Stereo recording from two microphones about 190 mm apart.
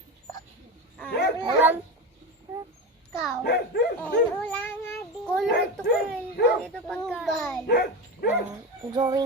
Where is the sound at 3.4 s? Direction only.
60° left (ahead or behind).